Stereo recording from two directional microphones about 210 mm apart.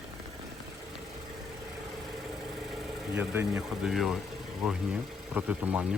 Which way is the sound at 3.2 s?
10° right (ahead or behind).